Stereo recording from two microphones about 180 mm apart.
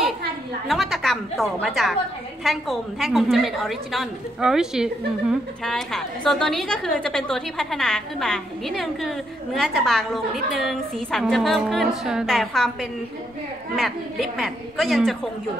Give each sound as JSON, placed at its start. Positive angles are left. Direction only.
{"t": 0.7, "sound": "a woman's voice", "side_deg": 0}
{"t": 13.7, "sound": "a woman's voice", "side_deg": 0}